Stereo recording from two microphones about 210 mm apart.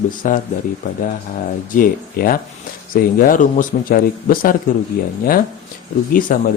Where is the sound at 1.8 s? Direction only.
40° left (ahead or behind).